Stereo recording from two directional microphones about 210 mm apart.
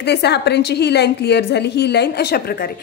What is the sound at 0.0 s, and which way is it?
A woman's voice, 50° left (ahead or behind).